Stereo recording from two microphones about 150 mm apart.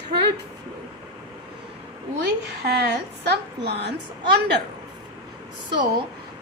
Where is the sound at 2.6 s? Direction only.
90° right.